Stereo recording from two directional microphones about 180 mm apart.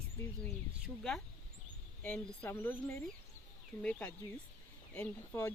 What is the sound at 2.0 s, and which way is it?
Speech, 5° left (ahead or behind).